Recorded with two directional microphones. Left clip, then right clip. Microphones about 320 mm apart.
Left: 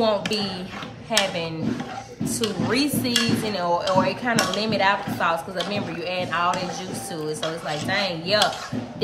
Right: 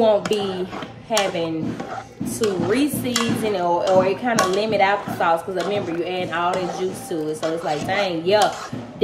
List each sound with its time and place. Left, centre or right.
0.0 s speech: centre